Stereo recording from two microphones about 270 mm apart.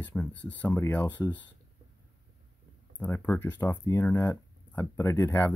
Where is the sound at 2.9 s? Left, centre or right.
Centre.